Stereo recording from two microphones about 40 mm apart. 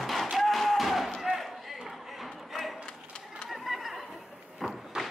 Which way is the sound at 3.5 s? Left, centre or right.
Centre.